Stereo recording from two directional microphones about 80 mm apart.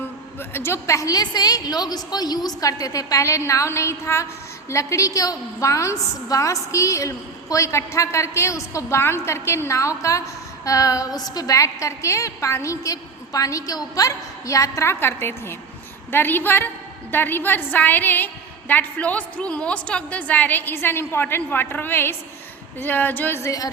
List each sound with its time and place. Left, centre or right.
0.3 s a woman's voice: left
23.4 s a woman's voice: left